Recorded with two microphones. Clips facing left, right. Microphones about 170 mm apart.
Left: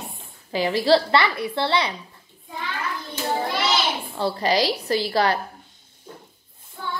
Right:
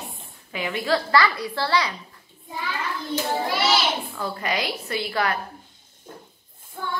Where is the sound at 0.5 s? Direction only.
35° left (ahead or behind).